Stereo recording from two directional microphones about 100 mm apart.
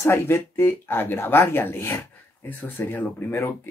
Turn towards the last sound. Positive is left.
turn(degrees=25)  # may be behind; listen again after turning